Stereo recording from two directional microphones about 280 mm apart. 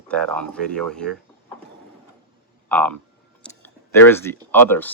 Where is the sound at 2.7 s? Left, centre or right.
Centre.